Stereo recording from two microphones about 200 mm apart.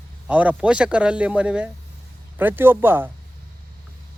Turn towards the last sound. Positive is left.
turn(degrees=-10)  # may be behind; listen again after turning